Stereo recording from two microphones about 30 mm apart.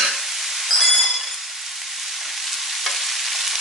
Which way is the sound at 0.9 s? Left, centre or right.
Centre.